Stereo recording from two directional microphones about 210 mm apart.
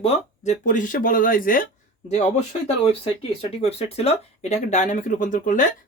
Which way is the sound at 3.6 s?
30° left (ahead or behind).